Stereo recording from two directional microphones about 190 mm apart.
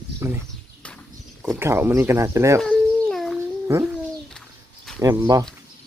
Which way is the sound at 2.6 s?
Centre (ahead or behind).